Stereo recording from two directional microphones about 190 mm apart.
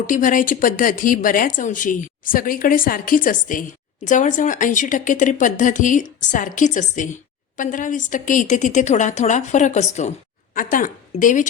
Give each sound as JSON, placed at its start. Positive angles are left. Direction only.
{"t": 0.1, "sound": "speech", "side_deg": 45}